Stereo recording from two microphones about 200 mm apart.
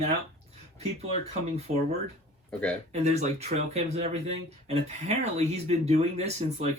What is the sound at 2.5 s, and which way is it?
Speech, 5° left (ahead or behind).